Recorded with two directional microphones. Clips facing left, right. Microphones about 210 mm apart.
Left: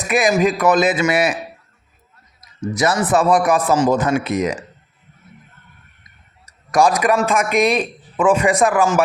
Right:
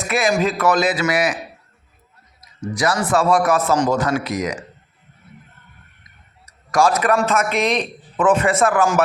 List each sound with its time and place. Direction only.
0.0 s a man's voice: 15° left (ahead or behind)
2.7 s a man's voice: 20° left (ahead or behind)
6.4 s a sound: 20° left (ahead or behind)
7.3 s a man's voice: 10° left (ahead or behind)
8.8 s speech: centre (ahead or behind)